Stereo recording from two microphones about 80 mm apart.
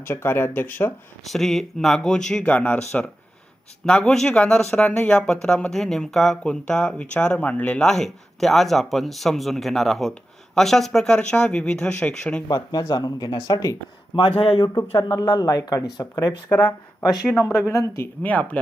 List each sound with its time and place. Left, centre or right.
0.0 s speech: left
1.2 s speech: centre
7.9 s speech: centre
12.5 s speech: left
14.1 s speech: left
14.9 s speech: left
16.5 s speech: centre
17.7 s speech: left
18.2 s speech: centre